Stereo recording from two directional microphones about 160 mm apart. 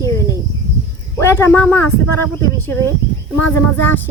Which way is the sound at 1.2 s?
15° left (ahead or behind).